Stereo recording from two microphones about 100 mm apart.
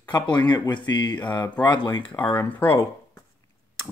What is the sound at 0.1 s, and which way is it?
Speech, 45° left (ahead or behind).